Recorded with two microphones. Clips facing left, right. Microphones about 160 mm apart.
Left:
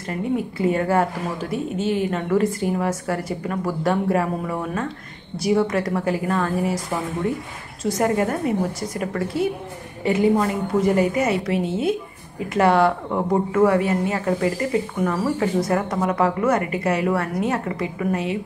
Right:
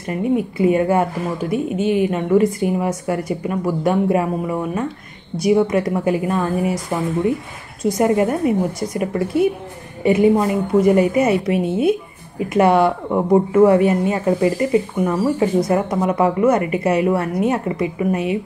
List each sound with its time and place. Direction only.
0.1 s speech: 15° right (ahead or behind)
7.8 s speech: 15° right (ahead or behind)
12.5 s speech: 20° right (ahead or behind)